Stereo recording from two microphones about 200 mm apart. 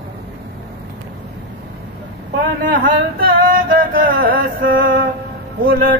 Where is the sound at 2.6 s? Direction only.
45° right (ahead or behind).